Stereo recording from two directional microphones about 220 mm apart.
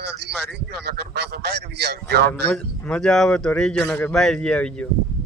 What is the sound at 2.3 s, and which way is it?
A man's voice, 5° left (ahead or behind).